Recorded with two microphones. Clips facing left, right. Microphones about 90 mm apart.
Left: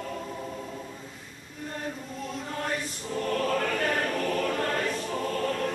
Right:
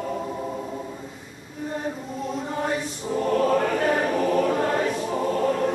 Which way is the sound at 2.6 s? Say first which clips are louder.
Right 4 dB; 15° right (ahead or behind).